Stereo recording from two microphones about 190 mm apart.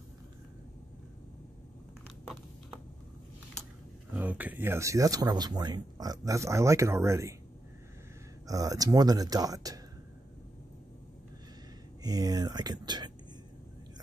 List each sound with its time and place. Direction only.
4.1 s speech: 10° right (ahead or behind)
8.5 s speech: 20° right (ahead or behind)
12.0 s speech: 20° right (ahead or behind)